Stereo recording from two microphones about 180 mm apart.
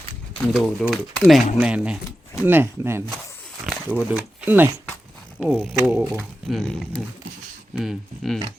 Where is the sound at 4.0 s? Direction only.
5° right (ahead or behind).